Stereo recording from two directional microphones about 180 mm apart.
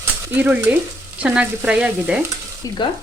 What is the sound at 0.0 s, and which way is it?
Stir, 10° right (ahead or behind).